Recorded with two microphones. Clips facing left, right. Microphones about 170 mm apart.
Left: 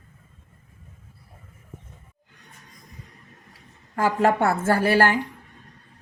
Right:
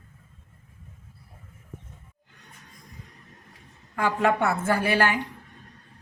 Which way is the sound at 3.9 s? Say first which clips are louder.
Left 3 dB; 40° left (ahead or behind).